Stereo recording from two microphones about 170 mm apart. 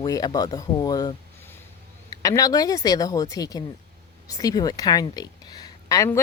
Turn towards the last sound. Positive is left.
turn(degrees=20)  # may be behind; listen again after turning